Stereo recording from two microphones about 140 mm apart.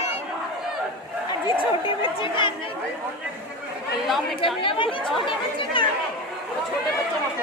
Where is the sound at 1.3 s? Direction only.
35° left (ahead or behind).